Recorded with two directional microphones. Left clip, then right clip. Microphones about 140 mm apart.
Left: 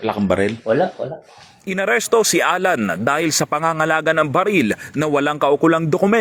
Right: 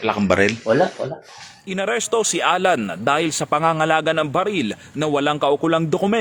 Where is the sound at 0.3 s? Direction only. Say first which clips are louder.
Right 1 dB; 15° left (ahead or behind).